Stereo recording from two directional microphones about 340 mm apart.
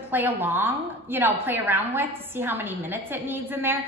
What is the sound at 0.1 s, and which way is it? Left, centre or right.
A woman's voice, centre.